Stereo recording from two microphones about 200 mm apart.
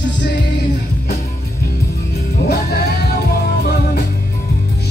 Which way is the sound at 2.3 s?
50° left (ahead or behind).